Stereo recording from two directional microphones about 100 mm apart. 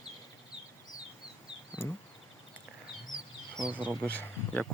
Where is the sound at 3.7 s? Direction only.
15° right (ahead or behind).